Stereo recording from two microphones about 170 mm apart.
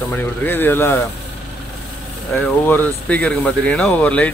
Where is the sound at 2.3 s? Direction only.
10° left (ahead or behind).